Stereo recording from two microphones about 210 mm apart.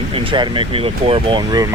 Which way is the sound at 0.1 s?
25° right (ahead or behind).